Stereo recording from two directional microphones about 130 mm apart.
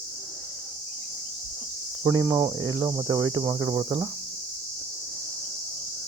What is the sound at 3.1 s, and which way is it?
Cricket, 25° right (ahead or behind).